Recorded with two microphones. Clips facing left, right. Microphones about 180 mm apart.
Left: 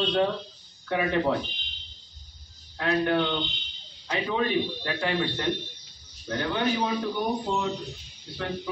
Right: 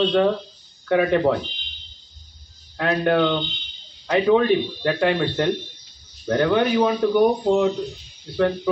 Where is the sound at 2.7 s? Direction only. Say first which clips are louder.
Right 5 dB; 65° right (ahead or behind).